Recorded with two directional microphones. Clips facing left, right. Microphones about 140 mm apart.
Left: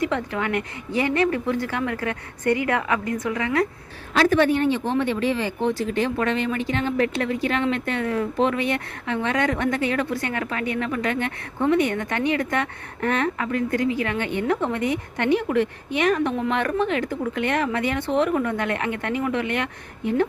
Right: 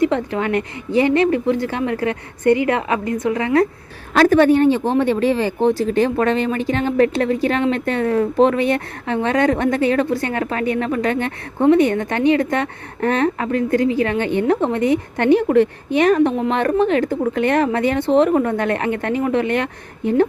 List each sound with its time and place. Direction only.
0.0 s speech: 30° right (ahead or behind)
4.1 s speech: 45° right (ahead or behind)